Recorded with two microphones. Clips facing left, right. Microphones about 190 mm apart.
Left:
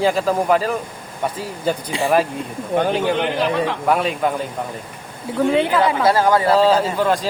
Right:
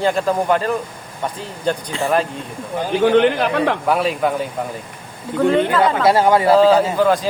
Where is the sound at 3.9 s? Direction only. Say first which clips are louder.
Right 1 dB; centre (ahead or behind).